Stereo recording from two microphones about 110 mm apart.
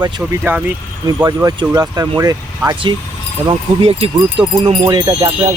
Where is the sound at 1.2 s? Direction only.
35° right (ahead or behind).